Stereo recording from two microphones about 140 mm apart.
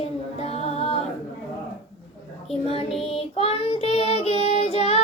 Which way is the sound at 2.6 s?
45° left (ahead or behind).